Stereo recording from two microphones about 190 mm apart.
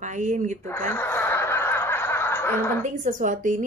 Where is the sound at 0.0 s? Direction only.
40° right (ahead or behind).